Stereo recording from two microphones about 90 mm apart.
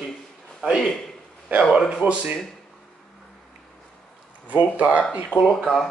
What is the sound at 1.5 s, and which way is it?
Speech, 15° right (ahead or behind).